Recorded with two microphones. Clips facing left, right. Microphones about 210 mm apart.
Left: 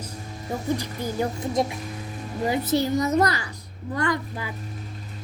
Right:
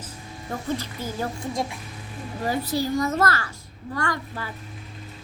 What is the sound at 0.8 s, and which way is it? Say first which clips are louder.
A child's voice: left 3 dB; 15° left (ahead or behind).